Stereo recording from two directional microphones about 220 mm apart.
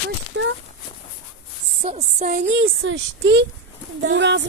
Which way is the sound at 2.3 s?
60° right (ahead or behind).